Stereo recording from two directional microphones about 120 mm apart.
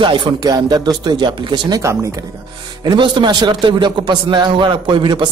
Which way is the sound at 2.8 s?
40° right (ahead or behind).